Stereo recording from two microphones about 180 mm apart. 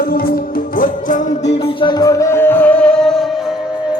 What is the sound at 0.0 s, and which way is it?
Music, 55° left (ahead or behind).